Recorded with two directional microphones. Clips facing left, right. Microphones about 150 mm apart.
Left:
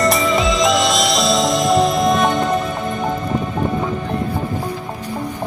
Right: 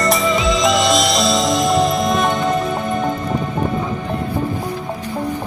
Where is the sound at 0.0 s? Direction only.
Centre (ahead or behind).